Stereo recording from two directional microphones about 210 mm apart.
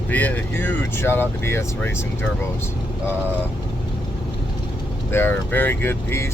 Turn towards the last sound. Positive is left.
turn(degrees=10)  # may be behind; listen again after turning